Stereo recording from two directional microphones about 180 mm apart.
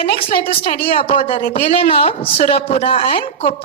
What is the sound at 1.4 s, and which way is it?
A woman's voice, 45° left (ahead or behind).